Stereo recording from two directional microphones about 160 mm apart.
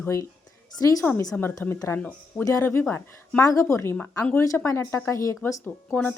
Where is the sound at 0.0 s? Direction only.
20° left (ahead or behind).